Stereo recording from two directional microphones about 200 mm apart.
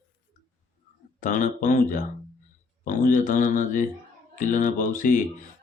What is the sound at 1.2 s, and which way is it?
Speech, 40° left (ahead or behind).